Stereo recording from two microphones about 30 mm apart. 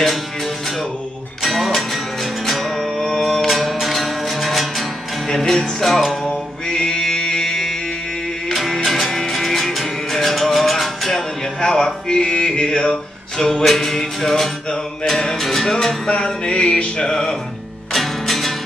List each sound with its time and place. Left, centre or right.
1.6 s music: centre
2.8 s music: centre
3.4 s music: centre
5.3 s music: centre
5.9 s music: centre
6.7 s mantra: left
7.1 s music: left
8.5 s music: centre
11.1 s music: centre
13.4 s music: centre
16.1 s a sound: left
17.9 s music: centre